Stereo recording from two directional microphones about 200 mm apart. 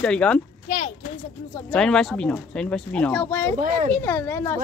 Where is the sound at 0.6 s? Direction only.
35° left (ahead or behind).